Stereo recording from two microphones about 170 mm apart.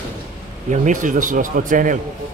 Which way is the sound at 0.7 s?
50° right (ahead or behind).